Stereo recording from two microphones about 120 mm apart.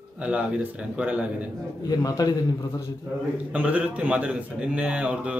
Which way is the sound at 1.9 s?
30° left (ahead or behind).